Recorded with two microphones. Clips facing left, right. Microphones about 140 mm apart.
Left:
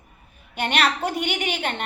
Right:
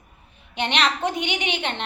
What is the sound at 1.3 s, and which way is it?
Speech, 45° left (ahead or behind).